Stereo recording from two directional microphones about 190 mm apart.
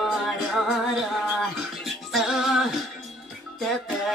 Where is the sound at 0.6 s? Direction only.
Centre (ahead or behind).